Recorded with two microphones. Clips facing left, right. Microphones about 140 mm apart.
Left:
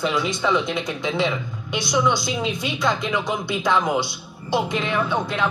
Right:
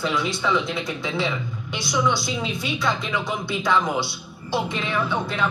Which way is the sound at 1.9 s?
20° left (ahead or behind).